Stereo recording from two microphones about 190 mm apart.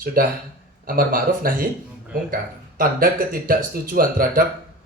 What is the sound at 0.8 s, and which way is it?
Speech, 50° right (ahead or behind).